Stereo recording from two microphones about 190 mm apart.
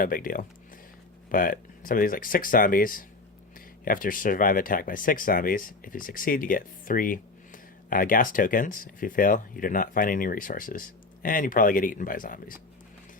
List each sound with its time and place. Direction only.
0.0 s speech: 50° left (ahead or behind)